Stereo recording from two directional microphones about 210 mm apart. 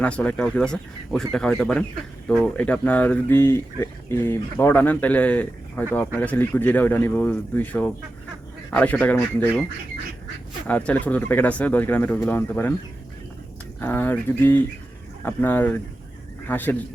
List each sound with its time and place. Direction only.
0.0 s speech: 5° left (ahead or behind)
10.7 s speech: 5° left (ahead or behind)
13.8 s speech: 10° left (ahead or behind)